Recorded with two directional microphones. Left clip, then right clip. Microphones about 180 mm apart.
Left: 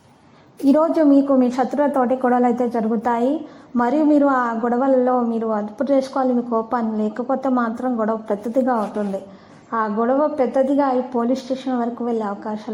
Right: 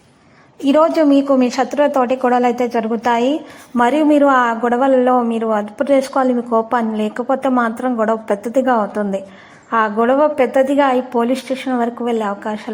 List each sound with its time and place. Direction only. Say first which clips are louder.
0.8 s a woman's voice: right 4 dB; 25° right (ahead or behind)